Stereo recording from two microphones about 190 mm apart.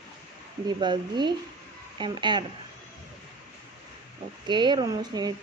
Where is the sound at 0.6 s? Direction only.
25° right (ahead or behind).